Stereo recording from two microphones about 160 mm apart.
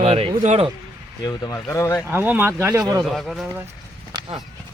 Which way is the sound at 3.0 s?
Centre (ahead or behind).